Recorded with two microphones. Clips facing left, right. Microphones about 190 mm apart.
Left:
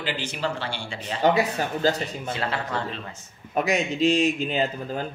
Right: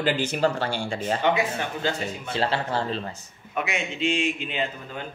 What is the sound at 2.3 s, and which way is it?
Speech, 30° right (ahead or behind).